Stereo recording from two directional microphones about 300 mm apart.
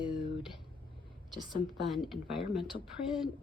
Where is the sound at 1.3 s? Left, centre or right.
Centre.